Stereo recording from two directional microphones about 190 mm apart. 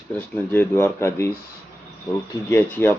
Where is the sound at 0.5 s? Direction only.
10° left (ahead or behind).